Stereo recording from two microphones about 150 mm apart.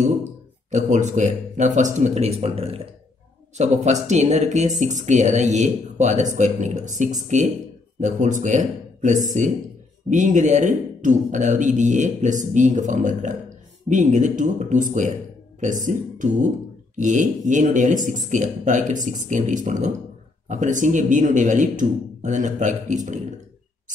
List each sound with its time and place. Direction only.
0.7 s a man's voice: 55° right (ahead or behind)